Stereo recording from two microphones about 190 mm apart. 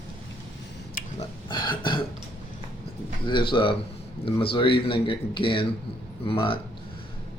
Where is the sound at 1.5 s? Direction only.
25° left (ahead or behind).